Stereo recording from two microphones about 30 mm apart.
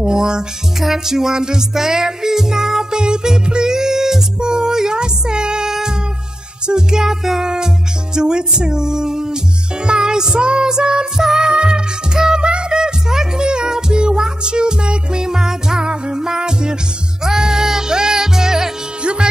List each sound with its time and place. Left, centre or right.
0.0 s music: right
0.7 s music: centre
3.0 s music: right
15.2 s music: centre